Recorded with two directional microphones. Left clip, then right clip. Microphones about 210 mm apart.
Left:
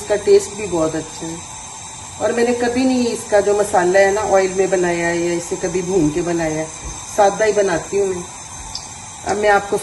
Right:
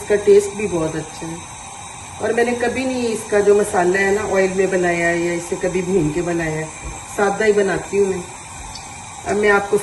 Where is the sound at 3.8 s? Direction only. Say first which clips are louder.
Left 3 dB; 50° left (ahead or behind).